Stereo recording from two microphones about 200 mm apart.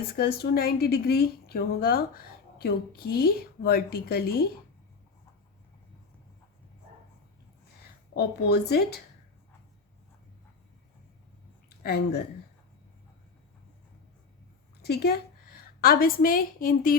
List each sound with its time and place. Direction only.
0.2 s a woman's voice: 50° left (ahead or behind)
8.1 s a woman's voice: 55° left (ahead or behind)
11.8 s a woman's voice: 55° left (ahead or behind)
14.8 s a woman's voice: 50° left (ahead or behind)